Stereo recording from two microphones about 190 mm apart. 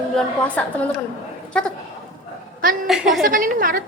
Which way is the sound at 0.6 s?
5° left (ahead or behind).